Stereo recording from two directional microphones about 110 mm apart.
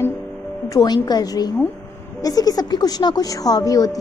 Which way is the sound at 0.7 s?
40° left (ahead or behind).